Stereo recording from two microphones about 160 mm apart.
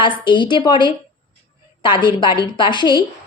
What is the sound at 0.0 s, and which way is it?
A woman's voice, 30° left (ahead or behind).